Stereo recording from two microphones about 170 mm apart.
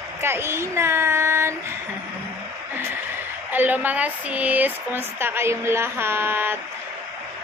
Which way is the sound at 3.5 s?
10° right (ahead or behind).